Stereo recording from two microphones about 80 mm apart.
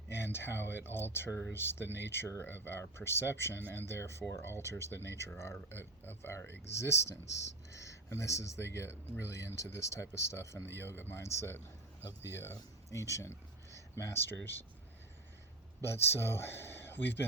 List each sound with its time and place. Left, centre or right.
0.3 s speech: left
15.8 s speech: left